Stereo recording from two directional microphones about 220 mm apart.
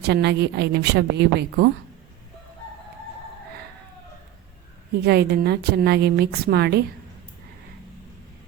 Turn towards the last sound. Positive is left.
turn(degrees=-45)  # may be behind; listen again after turning